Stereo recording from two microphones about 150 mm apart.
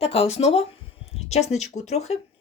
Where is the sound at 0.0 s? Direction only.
40° left (ahead or behind).